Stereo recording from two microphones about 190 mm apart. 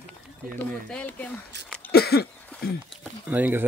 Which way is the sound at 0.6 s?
5° left (ahead or behind).